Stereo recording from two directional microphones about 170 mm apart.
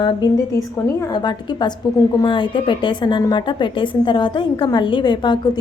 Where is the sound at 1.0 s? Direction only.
25° left (ahead or behind).